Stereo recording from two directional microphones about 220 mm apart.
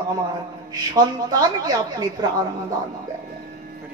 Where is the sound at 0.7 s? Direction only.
20° right (ahead or behind).